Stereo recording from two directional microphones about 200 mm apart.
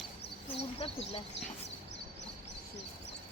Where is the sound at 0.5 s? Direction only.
30° left (ahead or behind).